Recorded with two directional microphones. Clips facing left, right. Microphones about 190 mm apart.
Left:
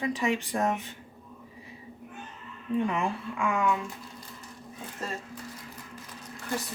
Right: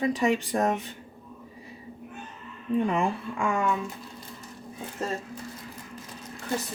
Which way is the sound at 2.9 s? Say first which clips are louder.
Right 3 dB; 35° right (ahead or behind).